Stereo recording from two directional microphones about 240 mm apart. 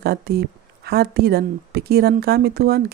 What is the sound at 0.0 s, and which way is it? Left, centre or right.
Speech, right.